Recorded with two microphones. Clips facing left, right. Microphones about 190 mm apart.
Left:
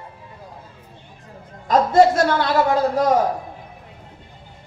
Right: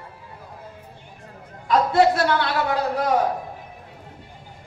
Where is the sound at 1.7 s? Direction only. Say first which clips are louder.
Left 3 dB; 45° left (ahead or behind).